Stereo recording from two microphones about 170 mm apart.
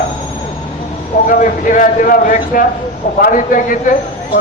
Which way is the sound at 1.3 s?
50° left (ahead or behind).